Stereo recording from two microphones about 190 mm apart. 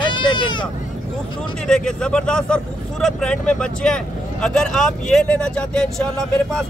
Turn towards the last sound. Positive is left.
turn(degrees=5)  # may be behind; listen again after turning